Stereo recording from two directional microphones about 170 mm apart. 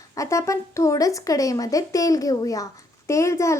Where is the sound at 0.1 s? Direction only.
20° left (ahead or behind).